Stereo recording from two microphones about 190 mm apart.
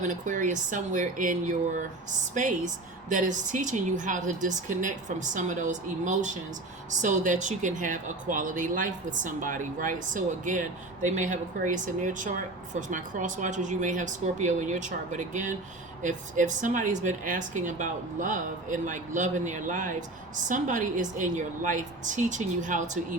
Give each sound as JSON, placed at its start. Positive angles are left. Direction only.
{"t": 0.0, "sound": "speech", "side_deg": -40}